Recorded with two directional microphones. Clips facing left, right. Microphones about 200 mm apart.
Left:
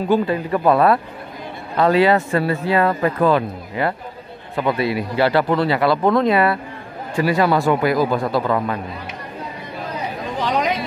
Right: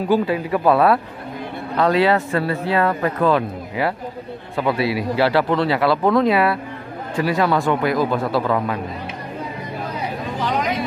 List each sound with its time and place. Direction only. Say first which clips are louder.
0.1 s speech: even; 5° right (ahead or behind)